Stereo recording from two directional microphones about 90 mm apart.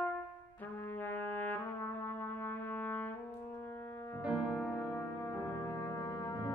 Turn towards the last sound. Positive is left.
turn(degrees=-10)  # may be behind; listen again after turning